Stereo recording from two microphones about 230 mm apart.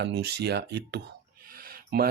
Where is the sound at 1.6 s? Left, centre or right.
Right.